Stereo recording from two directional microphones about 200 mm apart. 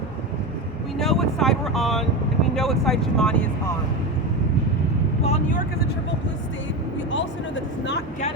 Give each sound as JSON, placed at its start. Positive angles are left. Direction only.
{"t": 0.9, "sound": "vehicle", "side_deg": 0}
{"t": 2.6, "sound": "speech", "side_deg": 0}
{"t": 5.2, "sound": "speech", "side_deg": 35}
{"t": 7.1, "sound": "speech", "side_deg": 65}